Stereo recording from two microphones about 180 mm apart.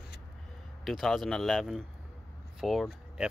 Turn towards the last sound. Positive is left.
turn(degrees=0)  # may be behind; listen again after turning